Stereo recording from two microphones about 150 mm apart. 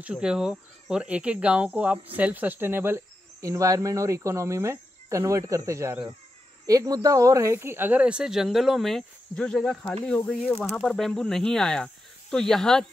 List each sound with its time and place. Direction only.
0.0 s speech: 5° right (ahead or behind)
2.1 s cricket: 10° right (ahead or behind)
6.6 s speech: 25° right (ahead or behind); by 12.8 s 5° left (ahead or behind)